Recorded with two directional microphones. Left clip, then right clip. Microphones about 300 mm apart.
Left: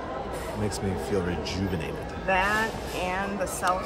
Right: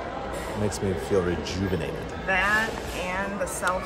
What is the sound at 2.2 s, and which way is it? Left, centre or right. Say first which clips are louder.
Speech: right 1 dB; left.